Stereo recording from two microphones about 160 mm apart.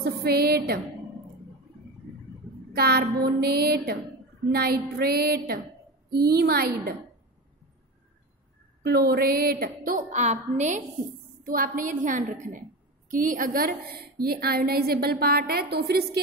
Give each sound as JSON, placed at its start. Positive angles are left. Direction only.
{"t": 0.0, "sound": "a sound", "side_deg": -80}
{"t": 2.7, "sound": "a woman's voice", "side_deg": -75}
{"t": 8.8, "sound": "a woman's voice", "side_deg": -80}
{"t": 11.4, "sound": "a woman's voice", "side_deg": -65}